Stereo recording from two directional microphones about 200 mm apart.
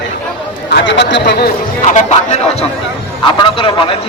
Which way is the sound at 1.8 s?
35° left (ahead or behind).